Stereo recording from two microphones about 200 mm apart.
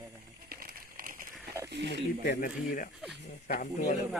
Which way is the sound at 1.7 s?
60° right (ahead or behind).